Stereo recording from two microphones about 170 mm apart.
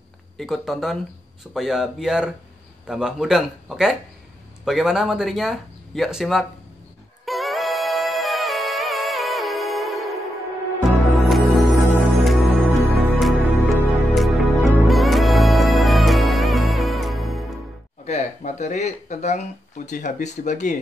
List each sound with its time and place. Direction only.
0.4 s speech: centre (ahead or behind)
7.2 s music: centre (ahead or behind)
18.0 s speech: 40° left (ahead or behind)